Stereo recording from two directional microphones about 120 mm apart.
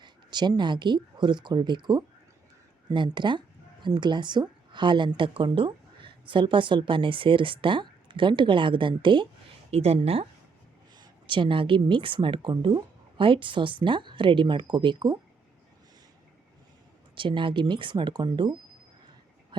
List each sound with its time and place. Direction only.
0.0 s a woman's voice: 40° right (ahead or behind)
9.7 s speech: 55° right (ahead or behind)
10.9 s a woman's voice: 40° right (ahead or behind)
17.2 s a woman's voice: 45° right (ahead or behind)